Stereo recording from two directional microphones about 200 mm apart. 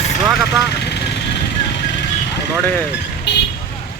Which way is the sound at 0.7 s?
55° left (ahead or behind).